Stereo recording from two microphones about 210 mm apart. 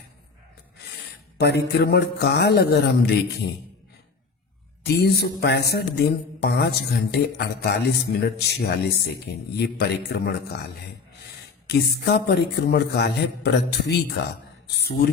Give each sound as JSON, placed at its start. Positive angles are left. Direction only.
{"t": 1.4, "sound": "mantra", "side_deg": 50}
{"t": 4.8, "sound": "mantra", "side_deg": 50}
{"t": 11.7, "sound": "mantra", "side_deg": 50}